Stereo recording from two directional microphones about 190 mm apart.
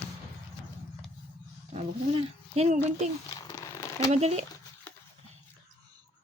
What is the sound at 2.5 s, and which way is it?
Speech, 35° right (ahead or behind).